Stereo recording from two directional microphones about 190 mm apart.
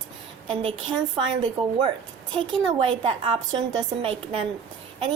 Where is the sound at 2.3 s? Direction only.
25° right (ahead or behind).